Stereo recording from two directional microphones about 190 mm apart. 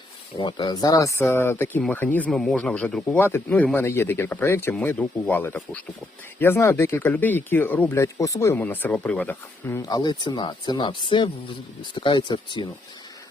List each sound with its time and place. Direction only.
0.3 s speech: 25° left (ahead or behind)